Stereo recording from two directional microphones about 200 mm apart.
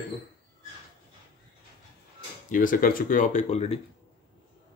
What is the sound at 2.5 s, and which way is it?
Speech, 40° left (ahead or behind).